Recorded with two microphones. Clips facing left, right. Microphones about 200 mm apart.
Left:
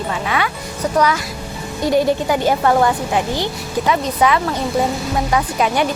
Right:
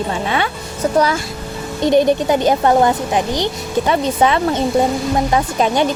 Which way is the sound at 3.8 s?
30° right (ahead or behind).